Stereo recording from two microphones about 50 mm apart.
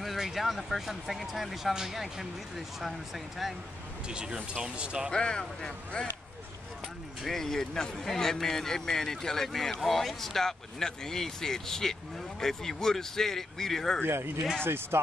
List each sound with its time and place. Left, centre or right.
0.0 s speech: centre
4.1 s speech: centre
5.1 s speech: centre
7.2 s speech: centre
14.0 s speech: right